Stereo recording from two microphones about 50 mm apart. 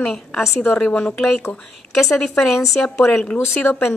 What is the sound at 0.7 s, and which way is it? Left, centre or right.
Speech, left.